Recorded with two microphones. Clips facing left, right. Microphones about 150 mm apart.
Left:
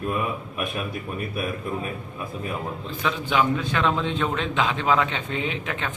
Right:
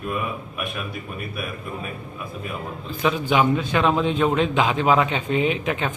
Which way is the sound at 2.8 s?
15° right (ahead or behind).